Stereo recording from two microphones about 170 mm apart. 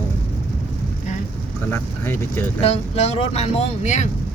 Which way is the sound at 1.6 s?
15° left (ahead or behind).